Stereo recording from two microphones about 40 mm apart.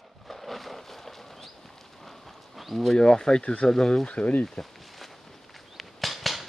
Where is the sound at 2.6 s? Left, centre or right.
Centre.